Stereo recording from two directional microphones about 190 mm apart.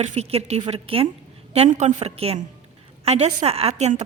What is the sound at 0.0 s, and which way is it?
A woman's voice, 35° right (ahead or behind).